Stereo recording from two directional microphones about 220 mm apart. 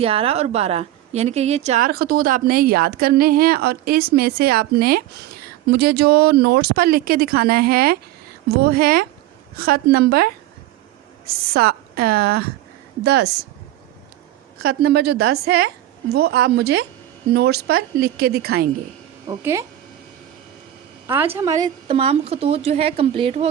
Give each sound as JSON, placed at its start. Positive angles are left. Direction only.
{"t": 0.0, "sound": "a woman's voice", "side_deg": -25}
{"t": 1.9, "sound": "a woman's voice", "side_deg": -45}
{"t": 14.7, "sound": "a woman's voice", "side_deg": -50}
{"t": 19.3, "sound": "speech", "side_deg": -10}
{"t": 21.3, "sound": "a woman's voice", "side_deg": -15}